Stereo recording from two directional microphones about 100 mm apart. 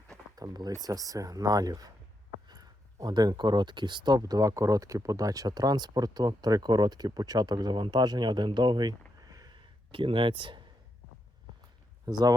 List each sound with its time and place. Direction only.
0.3 s speech: 40° right (ahead or behind)
9.6 s speech: 60° right (ahead or behind)
12.0 s speech: 40° right (ahead or behind)